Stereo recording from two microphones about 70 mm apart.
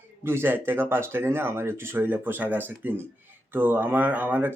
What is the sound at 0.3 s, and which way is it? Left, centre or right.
Speech, right.